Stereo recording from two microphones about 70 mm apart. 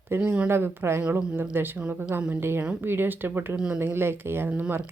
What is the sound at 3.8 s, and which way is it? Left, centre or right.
Speech, right.